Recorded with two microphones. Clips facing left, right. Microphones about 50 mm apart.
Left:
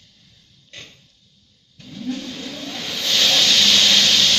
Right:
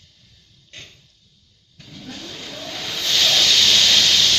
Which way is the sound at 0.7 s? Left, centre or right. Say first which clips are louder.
Left 1 dB; left.